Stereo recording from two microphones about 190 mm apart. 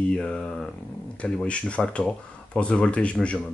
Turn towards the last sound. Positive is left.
turn(degrees=5)  # may be behind; listen again after turning